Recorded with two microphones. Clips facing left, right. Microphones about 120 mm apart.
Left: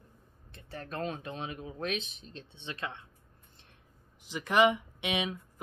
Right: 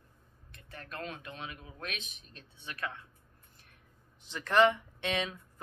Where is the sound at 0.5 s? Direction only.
30° left (ahead or behind).